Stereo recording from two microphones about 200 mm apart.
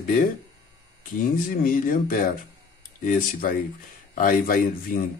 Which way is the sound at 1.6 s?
45° left (ahead or behind).